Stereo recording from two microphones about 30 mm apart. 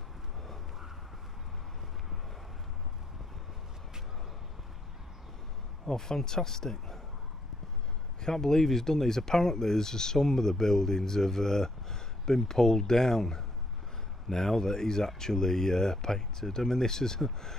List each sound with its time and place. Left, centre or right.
5.9 s speech: centre
8.2 s speech: centre